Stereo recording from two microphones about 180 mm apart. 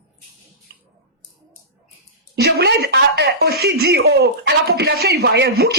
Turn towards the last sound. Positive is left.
turn(degrees=-65)  # may be behind; listen again after turning